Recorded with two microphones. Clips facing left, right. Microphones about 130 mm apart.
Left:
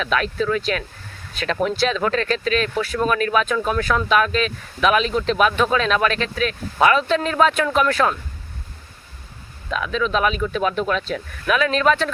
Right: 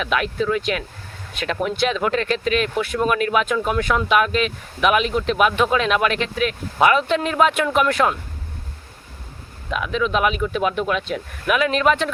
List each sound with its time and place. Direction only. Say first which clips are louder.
0.0 s speech: even; 15° right (ahead or behind)
9.6 s speech: even; 15° right (ahead or behind)